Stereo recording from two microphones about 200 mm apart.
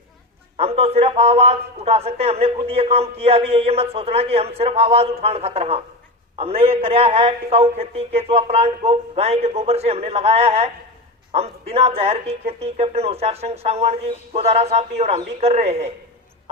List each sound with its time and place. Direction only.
0.5 s a man's voice: 30° right (ahead or behind)